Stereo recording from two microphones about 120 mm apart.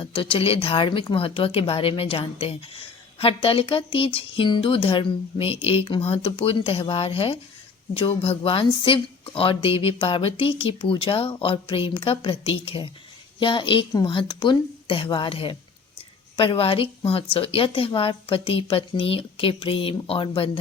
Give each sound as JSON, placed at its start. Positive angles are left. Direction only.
{"t": 0.0, "sound": "speech", "side_deg": 50}